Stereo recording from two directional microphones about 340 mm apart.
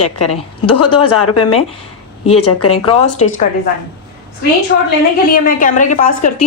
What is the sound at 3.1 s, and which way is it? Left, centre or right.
Speech, left.